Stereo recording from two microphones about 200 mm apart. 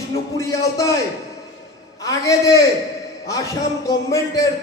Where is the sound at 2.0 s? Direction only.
15° left (ahead or behind).